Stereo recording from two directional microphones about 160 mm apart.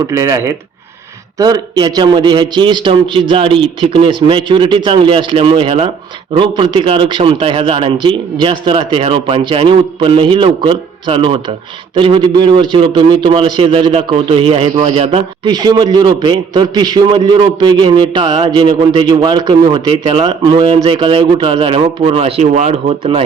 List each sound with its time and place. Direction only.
0.1 s a man's voice: 20° right (ahead or behind); by 15.5 s 35° right (ahead or behind)
15.5 s a man's voice: 25° right (ahead or behind)